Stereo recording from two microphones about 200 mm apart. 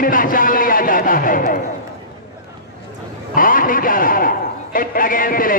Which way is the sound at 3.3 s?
45° left (ahead or behind).